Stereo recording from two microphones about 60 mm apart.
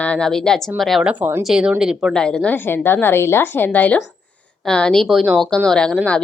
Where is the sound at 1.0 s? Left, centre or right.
Right.